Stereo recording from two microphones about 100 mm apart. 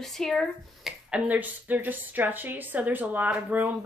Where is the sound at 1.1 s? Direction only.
15° right (ahead or behind).